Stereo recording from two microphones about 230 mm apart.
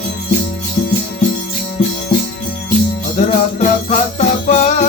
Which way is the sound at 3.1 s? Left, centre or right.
Left.